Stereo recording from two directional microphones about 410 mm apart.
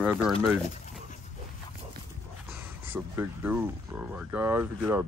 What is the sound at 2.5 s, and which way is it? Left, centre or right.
Speech, centre.